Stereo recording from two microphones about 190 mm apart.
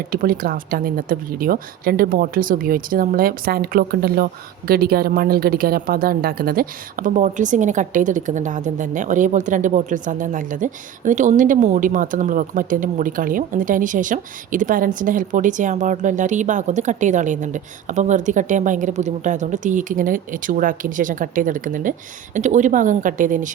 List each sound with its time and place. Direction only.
0.1 s a woman's voice: 50° right (ahead or behind)